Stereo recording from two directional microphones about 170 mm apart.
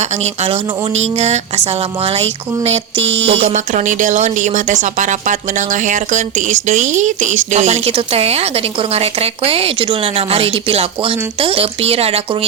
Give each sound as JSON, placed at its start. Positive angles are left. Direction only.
{"t": 0.0, "sound": "speech", "side_deg": -40}
{"t": 2.9, "sound": "a sound", "side_deg": -90}
{"t": 3.2, "sound": "speech", "side_deg": -40}